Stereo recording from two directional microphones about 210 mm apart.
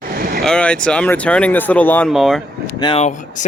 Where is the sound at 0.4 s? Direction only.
5° left (ahead or behind).